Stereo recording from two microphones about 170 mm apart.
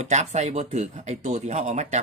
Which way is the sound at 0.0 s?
40° right (ahead or behind).